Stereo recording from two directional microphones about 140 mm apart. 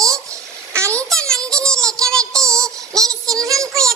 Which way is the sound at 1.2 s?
5° left (ahead or behind).